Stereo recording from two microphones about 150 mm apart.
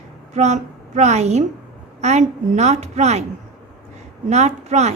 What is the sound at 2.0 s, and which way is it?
Music, 50° right (ahead or behind).